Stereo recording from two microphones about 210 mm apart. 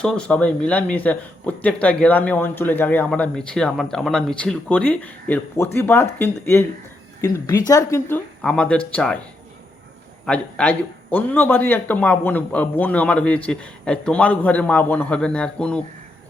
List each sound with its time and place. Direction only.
0.0 s a man's voice: 5° left (ahead or behind)
7.7 s a man's voice: 15° left (ahead or behind)
10.2 s a man's voice: 5° left (ahead or behind)